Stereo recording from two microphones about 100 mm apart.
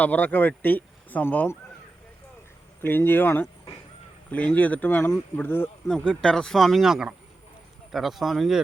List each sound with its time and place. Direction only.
0.0 s speech: 15° left (ahead or behind)
2.8 s speech: 20° left (ahead or behind)
5.8 s speech: 30° left (ahead or behind)
6.2 s speech: 5° left (ahead or behind)